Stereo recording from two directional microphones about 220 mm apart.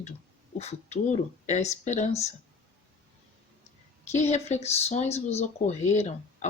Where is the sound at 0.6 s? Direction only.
30° left (ahead or behind).